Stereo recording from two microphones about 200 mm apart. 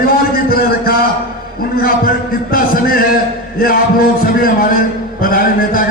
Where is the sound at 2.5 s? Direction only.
45° left (ahead or behind).